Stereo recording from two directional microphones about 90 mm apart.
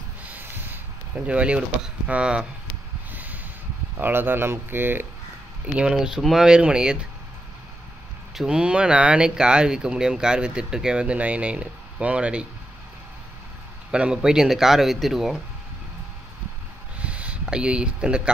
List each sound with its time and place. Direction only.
0.2 s a sound: 20° right (ahead or behind)
2.0 s speech: 10° right (ahead or behind)
3.1 s a sound: 20° right (ahead or behind)
4.0 s speech: 20° right (ahead or behind)
5.7 s speech: 10° right (ahead or behind)
8.4 s speech: 10° right (ahead or behind)
13.9 s speech: 10° right (ahead or behind)
17.0 s speech: 15° right (ahead or behind)